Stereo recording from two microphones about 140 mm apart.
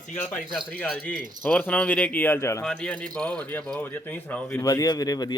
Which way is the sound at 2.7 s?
5° left (ahead or behind).